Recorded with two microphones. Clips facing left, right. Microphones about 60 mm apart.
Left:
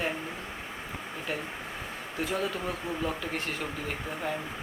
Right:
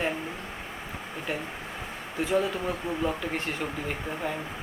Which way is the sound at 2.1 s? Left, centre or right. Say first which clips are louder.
Right 5 dB; centre.